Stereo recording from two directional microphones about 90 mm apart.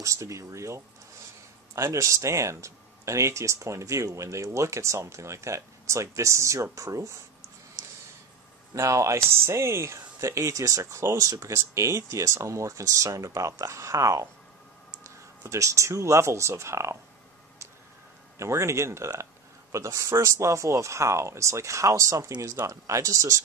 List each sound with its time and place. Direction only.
0.0 s speech: 35° right (ahead or behind)
8.7 s speech: 35° right (ahead or behind)
18.4 s speech: 35° right (ahead or behind)